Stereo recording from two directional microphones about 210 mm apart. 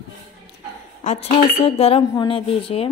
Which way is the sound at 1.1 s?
30° left (ahead or behind).